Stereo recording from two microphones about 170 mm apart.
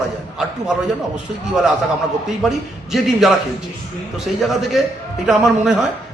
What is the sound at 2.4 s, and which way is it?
A man's voice, centre (ahead or behind).